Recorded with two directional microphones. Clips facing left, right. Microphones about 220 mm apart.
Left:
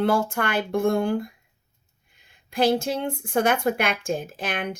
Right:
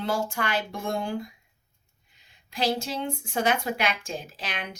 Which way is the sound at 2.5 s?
55° left (ahead or behind).